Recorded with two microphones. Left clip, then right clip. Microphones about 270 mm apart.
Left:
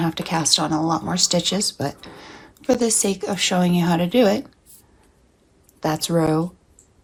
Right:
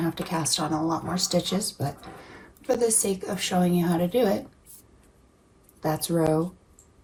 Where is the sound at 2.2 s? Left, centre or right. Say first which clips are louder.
Left 5 dB; centre.